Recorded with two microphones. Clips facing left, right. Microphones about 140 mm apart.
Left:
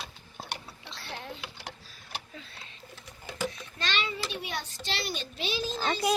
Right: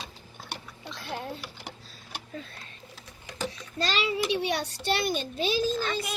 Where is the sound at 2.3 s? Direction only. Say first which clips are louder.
Right 7 dB; 45° right (ahead or behind).